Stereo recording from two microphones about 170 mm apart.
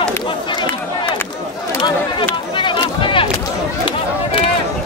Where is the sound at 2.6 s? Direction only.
30° left (ahead or behind).